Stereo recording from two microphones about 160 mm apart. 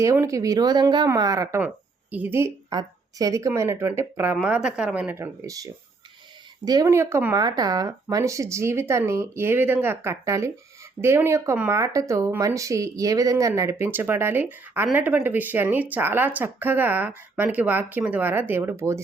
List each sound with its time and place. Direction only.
0.0 s speech: 20° right (ahead or behind)
7.3 s speech: 25° right (ahead or behind)